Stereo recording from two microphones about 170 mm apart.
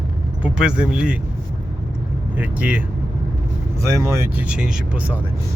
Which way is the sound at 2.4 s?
10° right (ahead or behind).